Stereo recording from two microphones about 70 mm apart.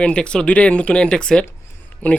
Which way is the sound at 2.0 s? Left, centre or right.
Left.